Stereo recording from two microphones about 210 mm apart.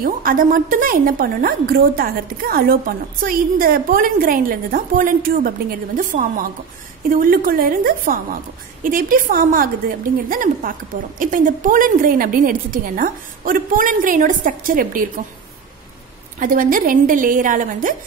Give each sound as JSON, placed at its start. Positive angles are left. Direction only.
{"t": 0.0, "sound": "a woman's voice", "side_deg": -45}
{"t": 16.3, "sound": "a woman's voice", "side_deg": -40}